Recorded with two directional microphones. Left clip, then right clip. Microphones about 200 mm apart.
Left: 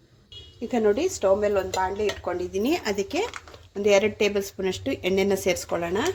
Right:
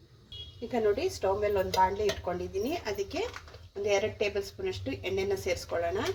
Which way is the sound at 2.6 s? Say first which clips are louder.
Left 9 dB; 55° left (ahead or behind).